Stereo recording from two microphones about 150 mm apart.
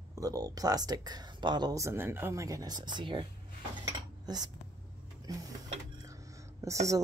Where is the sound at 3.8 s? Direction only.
25° right (ahead or behind).